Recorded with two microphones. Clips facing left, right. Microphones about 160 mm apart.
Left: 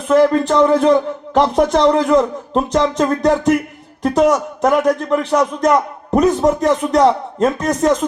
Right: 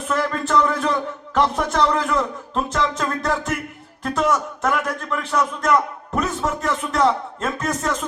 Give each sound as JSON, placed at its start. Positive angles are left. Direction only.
{"t": 0.1, "sound": "speech", "side_deg": 30}